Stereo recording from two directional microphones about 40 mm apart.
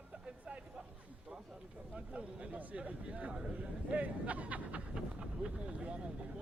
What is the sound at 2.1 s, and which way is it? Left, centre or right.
Speech, right.